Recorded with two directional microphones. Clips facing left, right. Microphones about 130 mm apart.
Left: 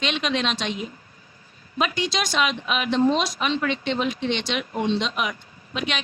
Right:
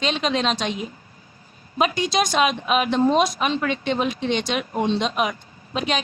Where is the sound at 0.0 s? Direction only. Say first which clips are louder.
Right 3 dB; 35° right (ahead or behind).